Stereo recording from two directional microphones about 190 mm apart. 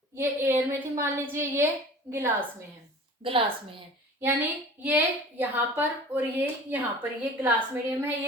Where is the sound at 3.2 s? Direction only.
30° right (ahead or behind).